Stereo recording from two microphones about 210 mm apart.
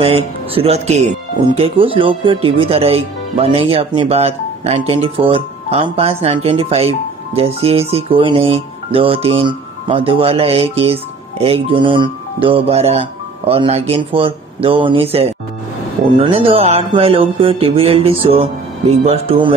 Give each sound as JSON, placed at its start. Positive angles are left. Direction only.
{"t": 0.0, "sound": "speech", "side_deg": -25}